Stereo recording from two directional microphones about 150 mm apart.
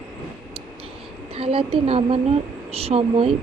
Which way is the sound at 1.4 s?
40° right (ahead or behind).